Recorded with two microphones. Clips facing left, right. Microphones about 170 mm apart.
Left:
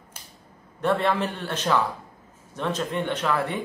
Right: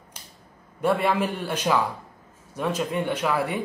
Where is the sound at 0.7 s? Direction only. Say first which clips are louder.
Right 1 dB; 10° right (ahead or behind).